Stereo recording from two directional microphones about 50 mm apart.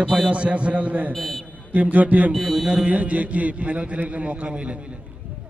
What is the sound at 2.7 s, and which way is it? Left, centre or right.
A man's voice, right.